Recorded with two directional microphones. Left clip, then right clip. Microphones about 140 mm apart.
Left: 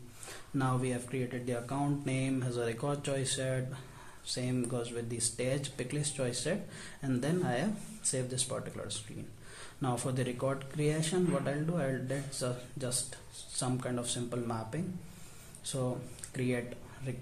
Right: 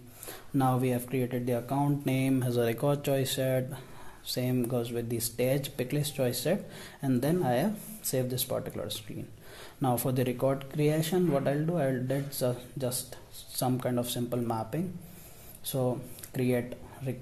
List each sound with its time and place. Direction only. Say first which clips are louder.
0.3 s speech: right 6 dB; 50° right (ahead or behind)